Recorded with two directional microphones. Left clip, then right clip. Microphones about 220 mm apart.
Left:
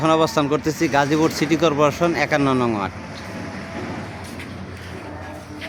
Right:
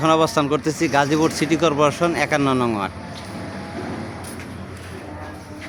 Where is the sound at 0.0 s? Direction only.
Centre (ahead or behind).